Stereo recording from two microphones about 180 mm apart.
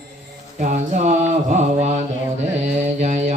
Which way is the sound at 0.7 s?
40° right (ahead or behind).